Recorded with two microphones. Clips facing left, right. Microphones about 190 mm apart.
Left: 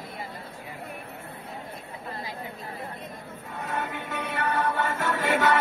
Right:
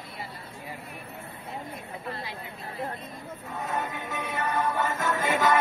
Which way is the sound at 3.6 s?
70° left (ahead or behind).